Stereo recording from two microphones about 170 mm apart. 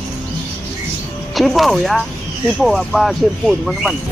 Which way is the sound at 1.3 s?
Centre (ahead or behind).